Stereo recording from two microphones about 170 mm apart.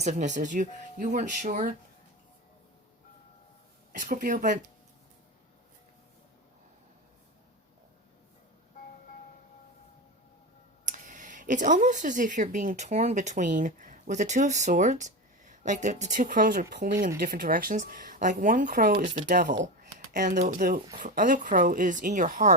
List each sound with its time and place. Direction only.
0.0 s speech: 45° right (ahead or behind)
3.9 s speech: 50° right (ahead or behind)
10.8 s speech: 45° right (ahead or behind); by 19.0 s 70° right (ahead or behind)
19.2 s speech: 50° right (ahead or behind)
19.8 s a sound: 60° right (ahead or behind)
20.4 s speech: 55° right (ahead or behind)